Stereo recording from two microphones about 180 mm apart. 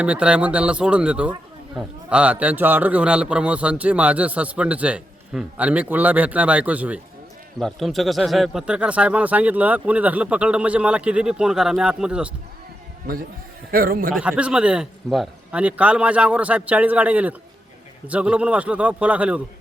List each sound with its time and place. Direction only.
0.0 s a man's voice: 5° right (ahead or behind)
13.7 s a man's voice: 55° right (ahead or behind)
14.1 s a man's voice: 5° right (ahead or behind)